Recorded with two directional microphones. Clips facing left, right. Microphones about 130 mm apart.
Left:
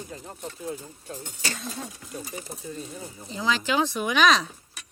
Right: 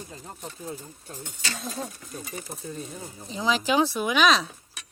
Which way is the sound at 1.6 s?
10° right (ahead or behind).